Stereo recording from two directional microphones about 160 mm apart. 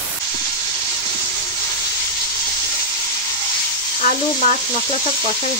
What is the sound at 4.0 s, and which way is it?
Sizzle, 50° left (ahead or behind).